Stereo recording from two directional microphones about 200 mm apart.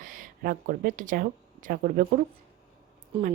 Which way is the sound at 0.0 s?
40° right (ahead or behind).